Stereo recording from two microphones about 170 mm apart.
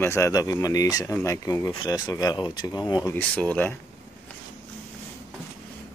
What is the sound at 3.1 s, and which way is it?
Speech, 10° left (ahead or behind).